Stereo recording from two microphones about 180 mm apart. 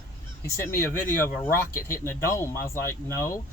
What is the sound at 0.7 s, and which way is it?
Speech, 10° left (ahead or behind).